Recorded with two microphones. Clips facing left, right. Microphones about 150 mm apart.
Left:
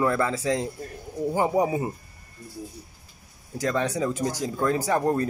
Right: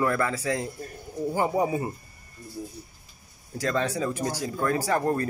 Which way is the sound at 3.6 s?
15° left (ahead or behind).